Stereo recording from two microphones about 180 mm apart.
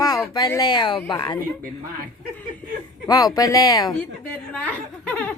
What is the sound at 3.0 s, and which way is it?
Speech, 20° left (ahead or behind).